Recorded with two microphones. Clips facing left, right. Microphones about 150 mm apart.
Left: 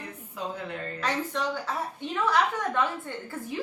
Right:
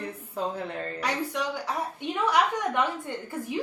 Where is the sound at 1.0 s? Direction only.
10° right (ahead or behind).